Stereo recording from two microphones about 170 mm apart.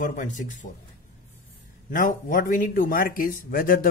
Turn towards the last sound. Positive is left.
turn(degrees=55)  # may be behind; listen again after turning